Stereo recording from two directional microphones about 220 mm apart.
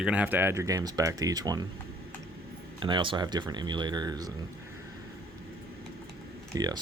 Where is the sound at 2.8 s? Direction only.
20° right (ahead or behind).